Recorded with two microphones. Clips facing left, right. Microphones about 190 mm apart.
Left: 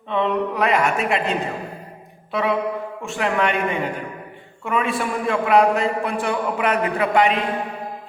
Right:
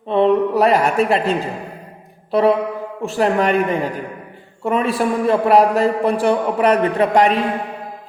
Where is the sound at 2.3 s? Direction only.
35° right (ahead or behind).